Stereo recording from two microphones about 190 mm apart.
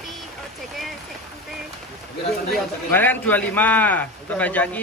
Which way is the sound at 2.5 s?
10° left (ahead or behind).